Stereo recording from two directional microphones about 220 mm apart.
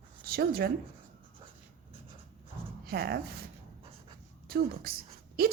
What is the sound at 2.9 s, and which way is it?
Speech, 45° right (ahead or behind).